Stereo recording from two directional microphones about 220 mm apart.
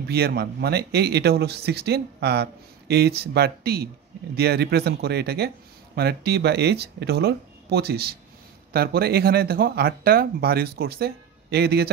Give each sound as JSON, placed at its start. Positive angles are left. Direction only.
{"t": 0.1, "sound": "speech", "side_deg": -45}